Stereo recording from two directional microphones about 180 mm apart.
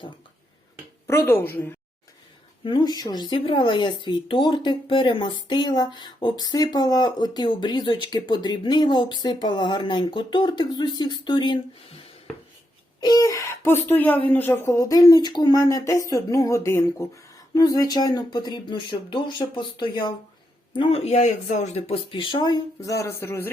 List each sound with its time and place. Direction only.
1.0 s speech: 15° left (ahead or behind)
2.6 s speech: 25° left (ahead or behind)
13.0 s speech: 20° left (ahead or behind)